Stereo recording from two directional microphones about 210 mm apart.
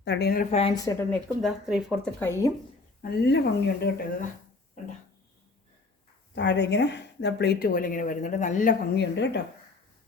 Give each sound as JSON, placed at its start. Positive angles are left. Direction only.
{"t": 0.0, "sound": "speech", "side_deg": 50}
{"t": 0.5, "sound": "speech", "side_deg": 20}
{"t": 1.4, "sound": "speech", "side_deg": 0}
{"t": 3.0, "sound": "speech", "side_deg": 50}
{"t": 6.3, "sound": "speech", "side_deg": 55}
{"t": 9.0, "sound": "speech", "side_deg": 55}